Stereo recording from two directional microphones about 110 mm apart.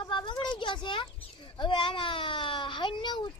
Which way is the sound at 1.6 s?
50° left (ahead or behind).